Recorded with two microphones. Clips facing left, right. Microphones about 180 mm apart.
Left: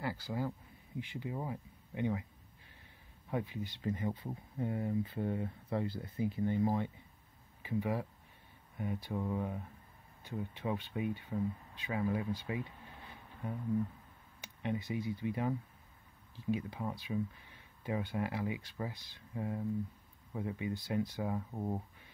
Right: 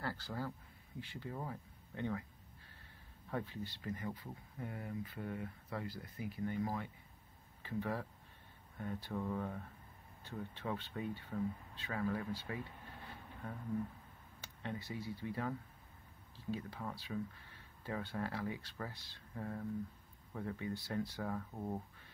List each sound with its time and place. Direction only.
0.0 s speech: 15° left (ahead or behind)
3.3 s speech: 15° left (ahead or behind)
7.6 s speech: 15° left (ahead or behind)